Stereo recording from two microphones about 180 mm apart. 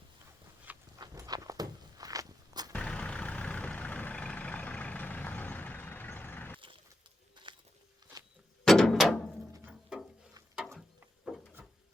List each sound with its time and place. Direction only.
0.9 s walk: 20° right (ahead or behind)
2.7 s vehicle: 5° left (ahead or behind)
7.5 s biting: 25° right (ahead or behind)
8.6 s a sound: centre (ahead or behind)
9.5 s music: 10° right (ahead or behind)
10.5 s mechanisms: centre (ahead or behind)
11.3 s a sound: centre (ahead or behind)